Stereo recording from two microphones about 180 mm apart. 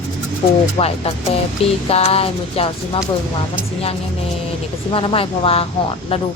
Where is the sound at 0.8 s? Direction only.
30° left (ahead or behind).